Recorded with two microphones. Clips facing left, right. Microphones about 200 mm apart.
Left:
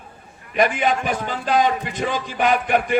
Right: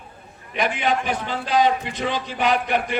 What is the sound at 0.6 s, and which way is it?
A man's voice, 50° left (ahead or behind).